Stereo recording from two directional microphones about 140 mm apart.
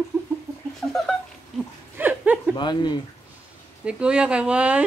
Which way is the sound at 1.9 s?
10° right (ahead or behind).